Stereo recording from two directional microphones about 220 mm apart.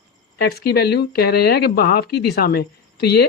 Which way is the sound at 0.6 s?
45° left (ahead or behind).